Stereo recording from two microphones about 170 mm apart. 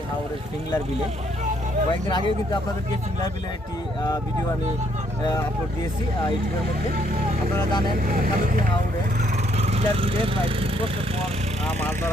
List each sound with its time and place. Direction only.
1.9 s speech: 25° left (ahead or behind)
7.5 s speech: 25° left (ahead or behind)
8.0 s speech: 55° right (ahead or behind)
9.6 s speech: 35° right (ahead or behind)
11.6 s speech: 10° left (ahead or behind)